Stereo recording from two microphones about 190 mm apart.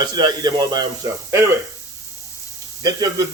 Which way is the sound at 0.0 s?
20° right (ahead or behind).